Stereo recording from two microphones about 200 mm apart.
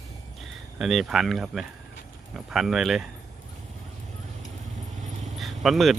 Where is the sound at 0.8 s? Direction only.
Centre (ahead or behind).